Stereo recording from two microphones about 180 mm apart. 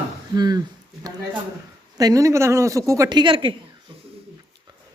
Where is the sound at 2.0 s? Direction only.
20° right (ahead or behind).